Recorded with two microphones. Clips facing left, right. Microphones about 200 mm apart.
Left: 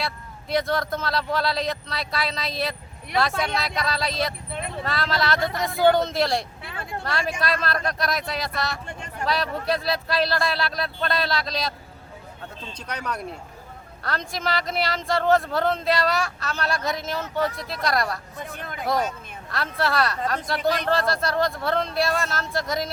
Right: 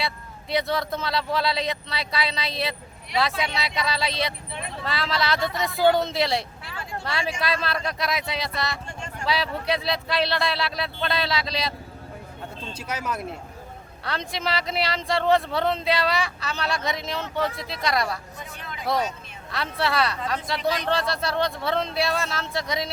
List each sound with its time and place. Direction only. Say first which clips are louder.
0.5 s speech: left 1 dB; centre (ahead or behind)
4.5 s vehicle: left 3 dB; 55° left (ahead or behind)
4.8 s speech: left 1 dB; centre (ahead or behind)
12.7 s speech: right 1 dB; 5° right (ahead or behind)
18.5 s speech: left 4 dB; 50° left (ahead or behind)
19.5 s speech: left 1 dB; centre (ahead or behind)